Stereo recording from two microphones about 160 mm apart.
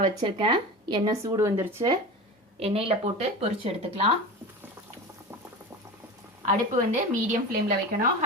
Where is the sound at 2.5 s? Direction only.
40° right (ahead or behind).